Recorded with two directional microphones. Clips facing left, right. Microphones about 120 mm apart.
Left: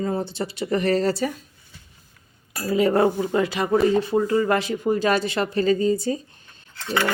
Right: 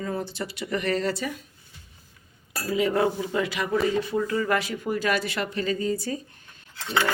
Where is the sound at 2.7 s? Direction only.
40° left (ahead or behind).